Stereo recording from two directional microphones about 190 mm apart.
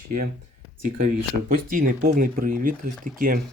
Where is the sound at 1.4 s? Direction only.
45° right (ahead or behind).